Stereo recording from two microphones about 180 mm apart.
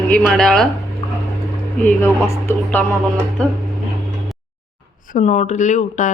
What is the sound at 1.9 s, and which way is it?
Speech, 10° left (ahead or behind).